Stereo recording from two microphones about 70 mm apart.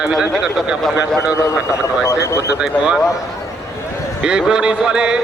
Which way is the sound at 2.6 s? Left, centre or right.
Centre.